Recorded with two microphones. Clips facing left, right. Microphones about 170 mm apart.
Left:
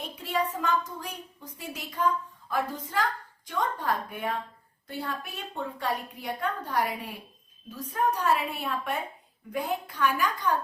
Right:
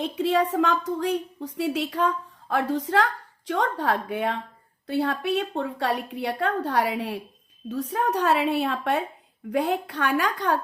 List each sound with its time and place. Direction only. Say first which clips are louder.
0.0 s speech: right 8 dB; 90° right